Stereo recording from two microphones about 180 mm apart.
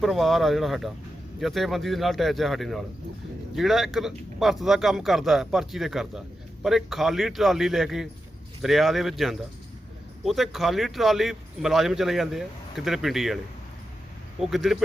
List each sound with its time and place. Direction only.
0.0 s a man's voice: centre (ahead or behind)
14.4 s a man's voice: centre (ahead or behind)